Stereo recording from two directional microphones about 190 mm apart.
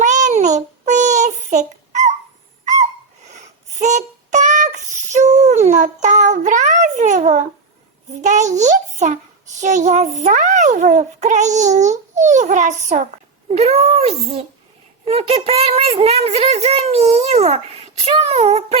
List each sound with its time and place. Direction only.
0.0 s child singing: 40° right (ahead or behind)
3.8 s music: 40° right (ahead or behind)
5.1 s child singing: 40° right (ahead or behind)
8.2 s a child's voice: 40° right (ahead or behind)